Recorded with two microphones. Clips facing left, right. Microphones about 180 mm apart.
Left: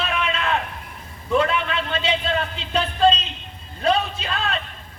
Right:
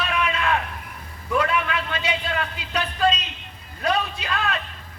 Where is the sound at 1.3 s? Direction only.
25° left (ahead or behind).